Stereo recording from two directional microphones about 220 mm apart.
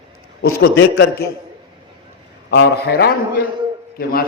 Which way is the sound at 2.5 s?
45° left (ahead or behind).